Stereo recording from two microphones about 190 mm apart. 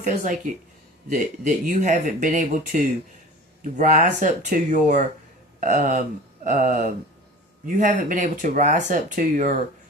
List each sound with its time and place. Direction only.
0.0 s speech: 45° right (ahead or behind)